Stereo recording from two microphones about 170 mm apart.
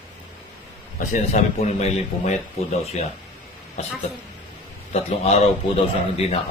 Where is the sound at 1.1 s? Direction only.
40° left (ahead or behind).